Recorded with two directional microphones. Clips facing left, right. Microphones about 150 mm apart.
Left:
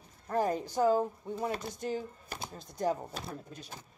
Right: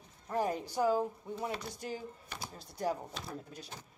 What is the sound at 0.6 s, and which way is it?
Speech, 45° left (ahead or behind).